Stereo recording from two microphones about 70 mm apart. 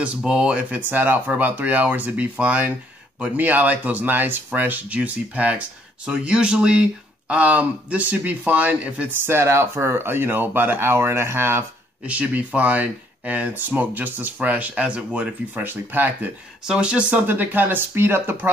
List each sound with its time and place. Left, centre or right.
0.0 s speech: centre
9.2 s speech: right
12.1 s speech: centre
16.6 s speech: centre
17.3 s speech: right